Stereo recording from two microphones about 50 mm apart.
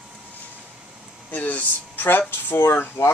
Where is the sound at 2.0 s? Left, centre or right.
Left.